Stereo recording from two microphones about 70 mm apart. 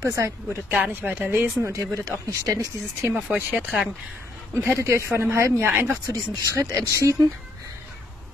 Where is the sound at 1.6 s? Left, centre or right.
Right.